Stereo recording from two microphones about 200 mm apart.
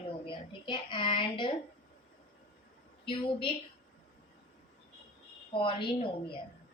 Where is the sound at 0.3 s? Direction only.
25° left (ahead or behind).